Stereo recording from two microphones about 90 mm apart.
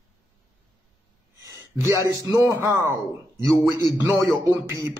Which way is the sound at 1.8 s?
30° right (ahead or behind).